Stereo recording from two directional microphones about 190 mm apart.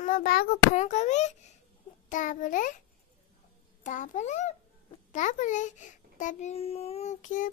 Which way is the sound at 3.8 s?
40° left (ahead or behind).